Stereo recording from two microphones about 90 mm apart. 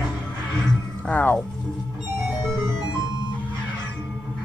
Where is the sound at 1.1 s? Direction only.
20° left (ahead or behind).